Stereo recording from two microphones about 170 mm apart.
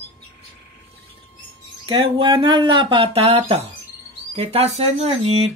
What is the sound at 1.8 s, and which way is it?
Speech, 30° right (ahead or behind).